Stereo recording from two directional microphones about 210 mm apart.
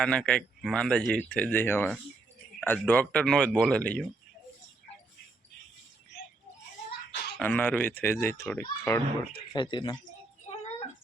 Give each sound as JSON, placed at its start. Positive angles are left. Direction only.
{"t": 0.0, "sound": "speech", "side_deg": 5}
{"t": 7.3, "sound": "a child's voice", "side_deg": 5}
{"t": 10.5, "sound": "a sound", "side_deg": 30}